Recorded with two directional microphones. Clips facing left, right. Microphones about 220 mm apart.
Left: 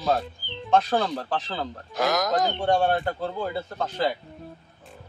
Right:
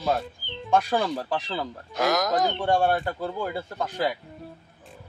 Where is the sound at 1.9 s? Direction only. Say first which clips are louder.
Even; centre (ahead or behind).